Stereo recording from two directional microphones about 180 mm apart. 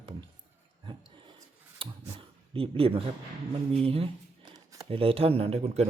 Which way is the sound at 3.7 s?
35° right (ahead or behind).